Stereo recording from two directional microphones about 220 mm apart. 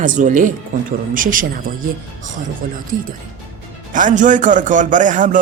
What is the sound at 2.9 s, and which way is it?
A man's voice, 40° right (ahead or behind).